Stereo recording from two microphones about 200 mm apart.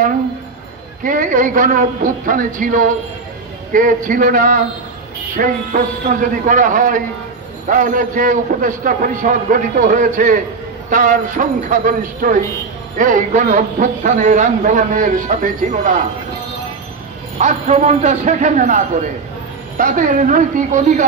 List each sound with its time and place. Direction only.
1.0 s a man's voice: 40° right (ahead or behind)
17.4 s a man's voice: 35° right (ahead or behind)